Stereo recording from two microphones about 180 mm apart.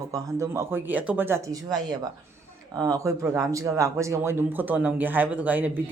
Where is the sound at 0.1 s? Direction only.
15° right (ahead or behind).